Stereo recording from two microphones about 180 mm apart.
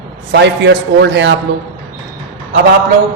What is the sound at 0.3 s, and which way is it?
A man's voice, 75° right (ahead or behind).